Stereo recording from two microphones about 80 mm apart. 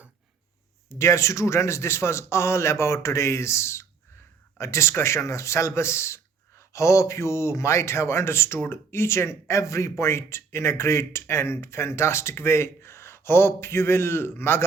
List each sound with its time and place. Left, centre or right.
0.9 s speech: left